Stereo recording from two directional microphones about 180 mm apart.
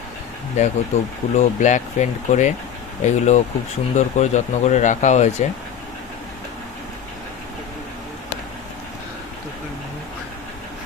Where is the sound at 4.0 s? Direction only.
40° left (ahead or behind).